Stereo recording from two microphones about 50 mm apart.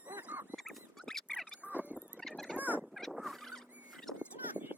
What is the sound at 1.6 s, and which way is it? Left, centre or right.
Rodents, right.